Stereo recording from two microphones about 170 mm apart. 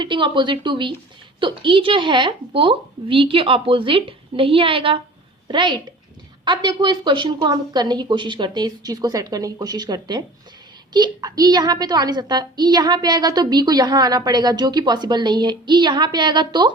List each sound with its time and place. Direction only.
0.0 s a woman's voice: 30° right (ahead or behind)